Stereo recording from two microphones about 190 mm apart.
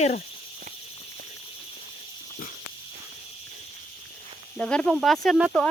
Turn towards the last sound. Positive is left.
turn(degrees=0)  # may be behind; listen again after turning